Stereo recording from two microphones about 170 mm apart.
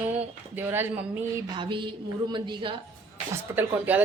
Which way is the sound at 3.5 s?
10° right (ahead or behind).